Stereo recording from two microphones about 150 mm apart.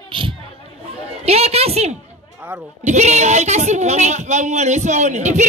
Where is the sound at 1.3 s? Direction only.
45° right (ahead or behind).